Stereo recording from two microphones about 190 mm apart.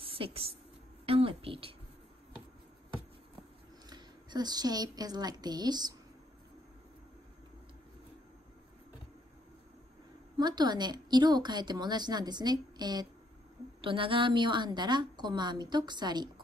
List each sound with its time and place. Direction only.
0.0 s a sound: 30° right (ahead or behind)
1.0 s speech: 30° right (ahead or behind)
3.9 s a woman's voice: 20° right (ahead or behind)
10.3 s speech: 20° right (ahead or behind)